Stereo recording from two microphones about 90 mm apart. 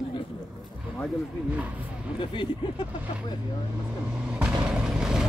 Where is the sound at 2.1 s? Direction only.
65° left (ahead or behind).